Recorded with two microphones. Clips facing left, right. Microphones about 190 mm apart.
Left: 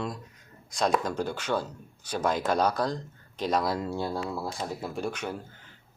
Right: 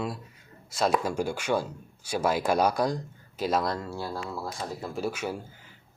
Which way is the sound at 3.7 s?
20° left (ahead or behind).